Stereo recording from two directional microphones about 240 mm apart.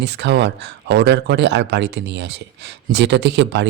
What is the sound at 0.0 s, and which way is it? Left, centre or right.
A man's voice, right.